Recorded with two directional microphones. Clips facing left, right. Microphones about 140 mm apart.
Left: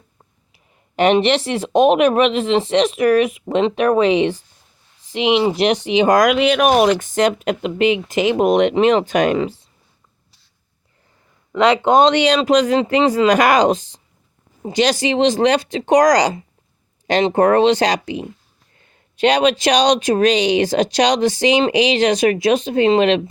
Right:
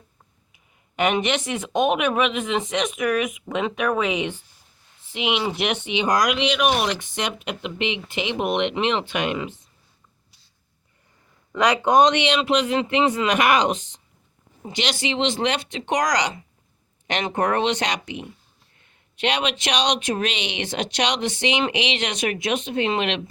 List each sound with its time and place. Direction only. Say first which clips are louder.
0.5 s speech: left 7 dB; 35° left (ahead or behind)
11.5 s speech: left 4 dB; 25° left (ahead or behind)